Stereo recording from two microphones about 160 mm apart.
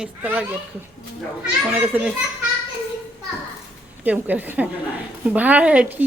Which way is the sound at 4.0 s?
10° right (ahead or behind).